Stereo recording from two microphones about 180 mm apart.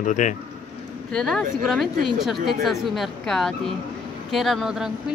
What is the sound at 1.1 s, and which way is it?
Speech, centre (ahead or behind).